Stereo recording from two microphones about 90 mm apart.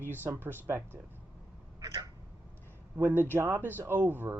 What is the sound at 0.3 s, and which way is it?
Speech, 25° right (ahead or behind).